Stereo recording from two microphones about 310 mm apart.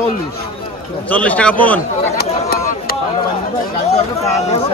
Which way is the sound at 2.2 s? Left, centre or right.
Left.